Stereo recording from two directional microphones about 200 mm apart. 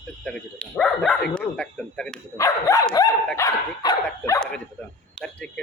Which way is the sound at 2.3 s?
15° left (ahead or behind).